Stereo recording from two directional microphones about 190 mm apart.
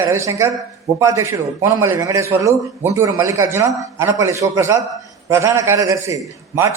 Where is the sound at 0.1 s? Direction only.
15° right (ahead or behind).